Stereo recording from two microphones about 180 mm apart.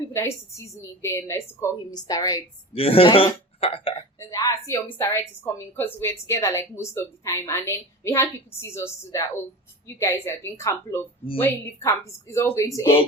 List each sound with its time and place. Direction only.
0.1 s a woman's voice: 15° left (ahead or behind)
2.7 s a man's voice: 30° left (ahead or behind)
4.2 s a woman's voice: 20° left (ahead or behind)